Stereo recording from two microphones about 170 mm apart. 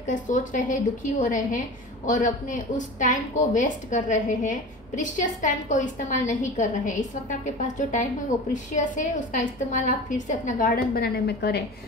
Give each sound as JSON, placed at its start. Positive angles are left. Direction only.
{"t": 0.0, "sound": "a woman's voice", "side_deg": 50}